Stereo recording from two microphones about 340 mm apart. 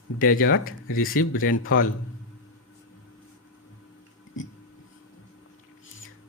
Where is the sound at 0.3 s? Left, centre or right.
Left.